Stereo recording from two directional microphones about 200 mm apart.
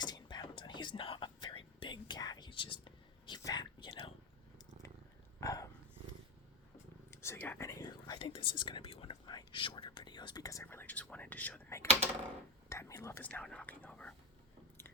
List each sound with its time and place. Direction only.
0.0 s whispering: 20° left (ahead or behind)
5.4 s dog: 15° left (ahead or behind)
7.1 s whispering: 15° left (ahead or behind)